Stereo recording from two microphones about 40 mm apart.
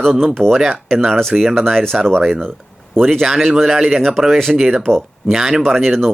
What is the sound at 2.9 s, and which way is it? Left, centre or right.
Speech, centre.